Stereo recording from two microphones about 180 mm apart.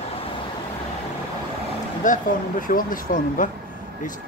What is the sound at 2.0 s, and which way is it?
Speech, 45° left (ahead or behind).